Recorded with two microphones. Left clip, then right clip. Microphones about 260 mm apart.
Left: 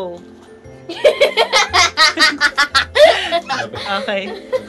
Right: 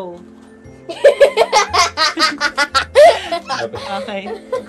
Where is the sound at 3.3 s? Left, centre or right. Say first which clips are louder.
Left 2 dB; right.